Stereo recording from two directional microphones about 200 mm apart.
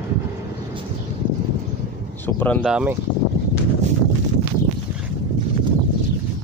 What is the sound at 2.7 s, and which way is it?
Speech, 5° right (ahead or behind).